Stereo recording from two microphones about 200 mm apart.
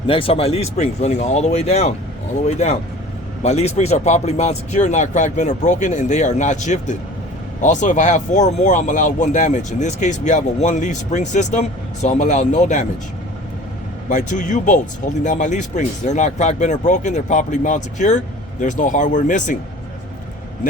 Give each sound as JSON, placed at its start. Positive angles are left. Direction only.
{"t": 0.1, "sound": "speech", "side_deg": 30}
{"t": 3.4, "sound": "speech", "side_deg": 35}
{"t": 14.1, "sound": "speech", "side_deg": 40}